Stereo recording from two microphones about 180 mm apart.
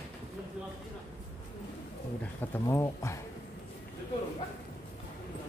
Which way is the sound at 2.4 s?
15° left (ahead or behind).